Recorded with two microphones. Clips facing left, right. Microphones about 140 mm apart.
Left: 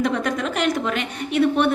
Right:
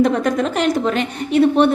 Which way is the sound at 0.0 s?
40° right (ahead or behind).